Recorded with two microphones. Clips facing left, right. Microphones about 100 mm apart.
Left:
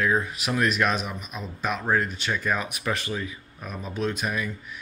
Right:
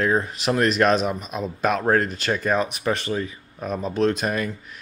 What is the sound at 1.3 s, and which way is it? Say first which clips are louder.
Speech: right 5 dB; 45° right (ahead or behind).